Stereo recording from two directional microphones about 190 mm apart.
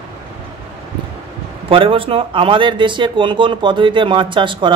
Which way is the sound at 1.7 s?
30° right (ahead or behind).